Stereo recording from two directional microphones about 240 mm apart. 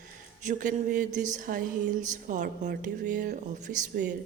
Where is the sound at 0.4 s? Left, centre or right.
Right.